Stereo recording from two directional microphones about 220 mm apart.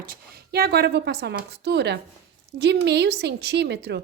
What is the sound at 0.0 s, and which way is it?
A woman's voice, 45° right (ahead or behind).